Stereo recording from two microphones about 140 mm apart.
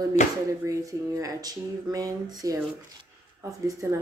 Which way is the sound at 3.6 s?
20° right (ahead or behind).